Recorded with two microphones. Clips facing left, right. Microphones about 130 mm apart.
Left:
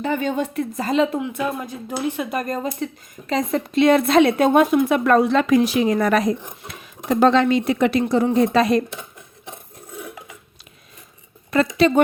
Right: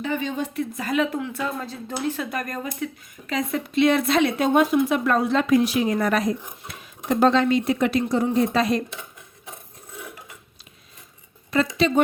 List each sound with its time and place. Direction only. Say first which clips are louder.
0.0 s a woman's voice: left 4 dB; 50° left (ahead or behind)
0.9 s speech: left 4 dB; 25° left (ahead or behind); by 8.8 s 70° left (ahead or behind)
11.5 s speech: left 4 dB; 55° left (ahead or behind)